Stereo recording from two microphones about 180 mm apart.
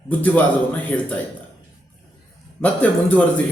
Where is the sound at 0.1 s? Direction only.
10° left (ahead or behind).